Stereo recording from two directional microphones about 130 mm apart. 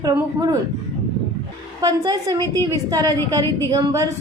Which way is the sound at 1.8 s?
30° right (ahead or behind).